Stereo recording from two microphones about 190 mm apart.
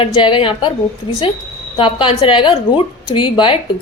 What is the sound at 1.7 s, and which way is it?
A woman's voice, 25° left (ahead or behind).